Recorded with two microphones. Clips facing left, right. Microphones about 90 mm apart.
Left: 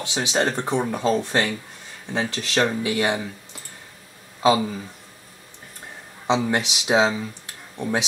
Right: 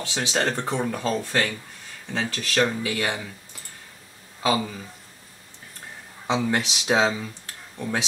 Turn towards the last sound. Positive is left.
turn(degrees=20)  # may be behind; listen again after turning